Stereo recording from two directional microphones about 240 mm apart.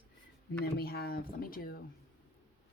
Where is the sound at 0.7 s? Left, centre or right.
Left.